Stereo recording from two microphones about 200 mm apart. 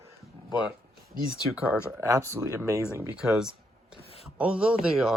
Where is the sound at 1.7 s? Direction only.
15° right (ahead or behind).